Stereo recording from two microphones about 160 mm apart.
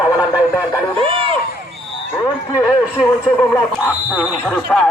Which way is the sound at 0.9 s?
35° right (ahead or behind).